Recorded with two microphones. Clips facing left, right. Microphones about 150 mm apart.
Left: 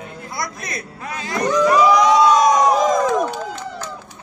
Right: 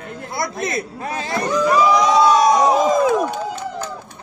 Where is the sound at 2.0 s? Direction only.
30° right (ahead or behind).